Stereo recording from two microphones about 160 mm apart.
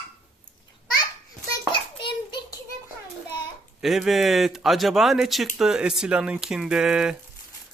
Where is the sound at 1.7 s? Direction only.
30° left (ahead or behind).